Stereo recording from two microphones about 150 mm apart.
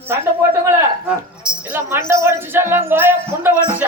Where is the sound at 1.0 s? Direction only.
5° right (ahead or behind).